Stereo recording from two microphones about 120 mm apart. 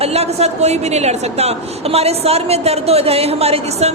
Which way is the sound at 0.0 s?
60° right (ahead or behind).